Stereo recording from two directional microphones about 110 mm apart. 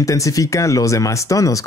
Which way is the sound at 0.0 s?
30° left (ahead or behind).